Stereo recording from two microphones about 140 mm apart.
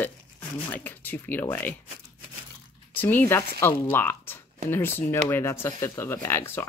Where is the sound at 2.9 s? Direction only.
15° left (ahead or behind).